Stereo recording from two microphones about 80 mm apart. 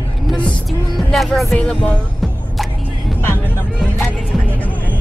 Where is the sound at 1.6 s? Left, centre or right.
Centre.